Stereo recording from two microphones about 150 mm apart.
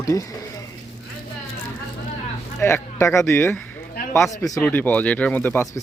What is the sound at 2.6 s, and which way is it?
Speech, 15° left (ahead or behind).